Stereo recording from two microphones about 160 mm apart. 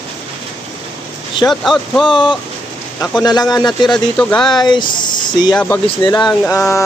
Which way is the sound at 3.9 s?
5° left (ahead or behind).